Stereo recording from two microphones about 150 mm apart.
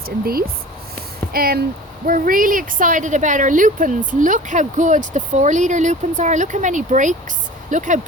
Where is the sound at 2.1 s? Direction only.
65° right (ahead or behind).